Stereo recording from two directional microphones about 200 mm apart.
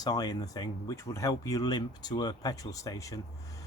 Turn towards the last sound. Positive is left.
turn(degrees=15)  # may be behind; listen again after turning